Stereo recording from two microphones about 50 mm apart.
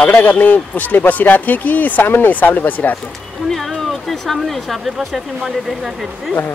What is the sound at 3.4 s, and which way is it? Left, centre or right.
Speech, centre.